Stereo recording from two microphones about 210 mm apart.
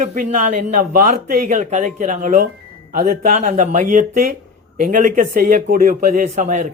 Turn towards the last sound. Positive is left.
turn(degrees=-35)  # may be behind; listen again after turning